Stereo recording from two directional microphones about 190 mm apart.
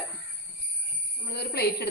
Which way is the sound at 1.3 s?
60° left (ahead or behind).